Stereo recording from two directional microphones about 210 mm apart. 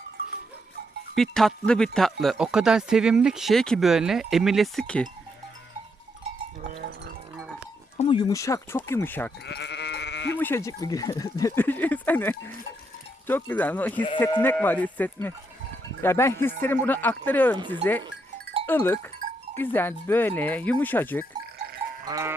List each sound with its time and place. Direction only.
1.1 s speech: centre (ahead or behind)
7.9 s speech: 25° left (ahead or behind)
9.5 s goat: 55° left (ahead or behind)
10.3 s speech: 10° left (ahead or behind)
18.6 s speech: 10° left (ahead or behind)
22.0 s livestock: 15° right (ahead or behind)